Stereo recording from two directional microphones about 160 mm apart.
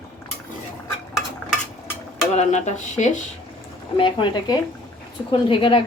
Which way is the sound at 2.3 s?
45° left (ahead or behind).